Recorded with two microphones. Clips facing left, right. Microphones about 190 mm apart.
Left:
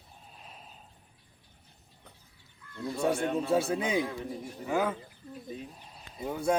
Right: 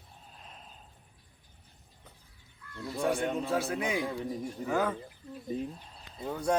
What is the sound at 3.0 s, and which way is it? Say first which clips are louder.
Speech: left 1 dB; 5° left (ahead or behind).